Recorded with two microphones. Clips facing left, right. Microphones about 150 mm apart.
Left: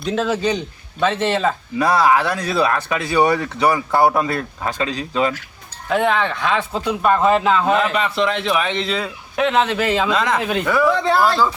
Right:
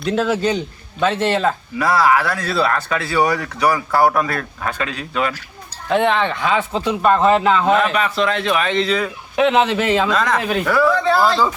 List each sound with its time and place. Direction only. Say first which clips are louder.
0.0 s speech: right 1 dB; centre (ahead or behind)
1.8 s speech: even; 20° left (ahead or behind)
5.9 s speech: right 1 dB; centre (ahead or behind)
7.9 s speech: right 1 dB; 20° left (ahead or behind)
9.3 s speech: right 2 dB; centre (ahead or behind)
10.1 s speech: even; 20° left (ahead or behind)
10.4 s speech: right 1 dB; centre (ahead or behind)